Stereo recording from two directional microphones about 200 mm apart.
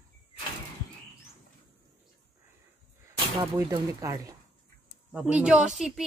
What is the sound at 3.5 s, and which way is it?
Speech, 15° right (ahead or behind).